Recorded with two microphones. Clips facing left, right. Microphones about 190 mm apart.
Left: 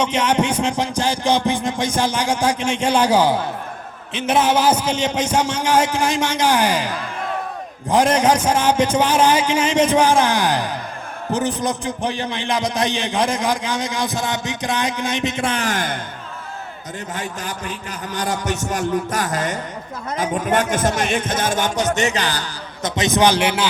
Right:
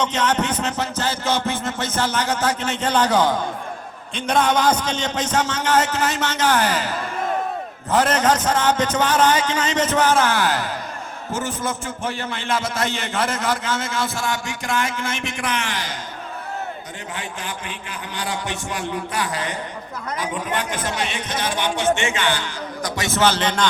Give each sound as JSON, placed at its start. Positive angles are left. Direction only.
{"t": 0.0, "sound": "a man's voice", "side_deg": 10}
{"t": 17.2, "sound": "a man's voice", "side_deg": 40}
{"t": 22.8, "sound": "a man's voice", "side_deg": 20}